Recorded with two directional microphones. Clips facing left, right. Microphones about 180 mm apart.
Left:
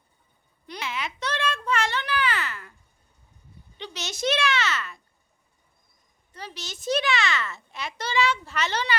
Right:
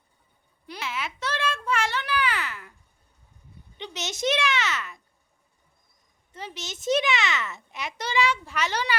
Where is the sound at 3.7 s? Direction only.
20° right (ahead or behind).